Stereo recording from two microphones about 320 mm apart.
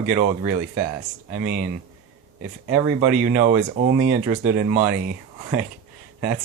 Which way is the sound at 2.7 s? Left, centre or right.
Centre.